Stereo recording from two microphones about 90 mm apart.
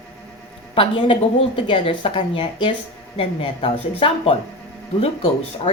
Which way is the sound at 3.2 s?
85° left.